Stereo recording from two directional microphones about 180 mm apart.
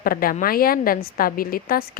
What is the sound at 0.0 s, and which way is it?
A woman's voice, 55° left (ahead or behind).